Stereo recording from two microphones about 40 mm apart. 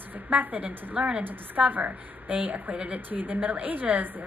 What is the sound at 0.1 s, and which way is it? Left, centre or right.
Speech, right.